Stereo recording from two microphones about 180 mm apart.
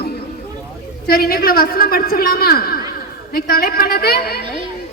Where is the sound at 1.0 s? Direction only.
60° left (ahead or behind).